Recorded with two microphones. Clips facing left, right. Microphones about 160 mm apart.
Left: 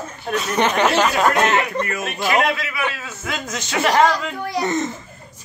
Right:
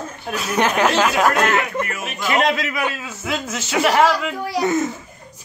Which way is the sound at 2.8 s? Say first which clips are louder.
Right 2 dB; 10° right (ahead or behind).